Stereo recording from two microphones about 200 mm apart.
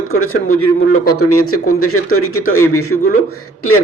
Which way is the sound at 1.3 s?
90° left.